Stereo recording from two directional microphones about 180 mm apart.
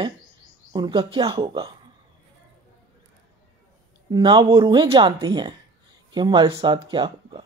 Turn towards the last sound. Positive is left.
turn(degrees=-25)  # may be behind; listen again after turning